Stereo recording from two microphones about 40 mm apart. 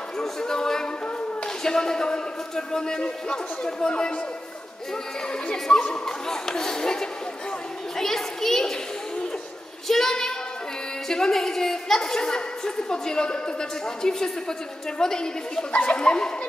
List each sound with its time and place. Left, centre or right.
0.2 s a sound: centre
1.6 s a woman's voice: centre
5.5 s a woman's voice: left
9.8 s child singing: centre
11.1 s a woman's voice: centre
15.7 s speech: left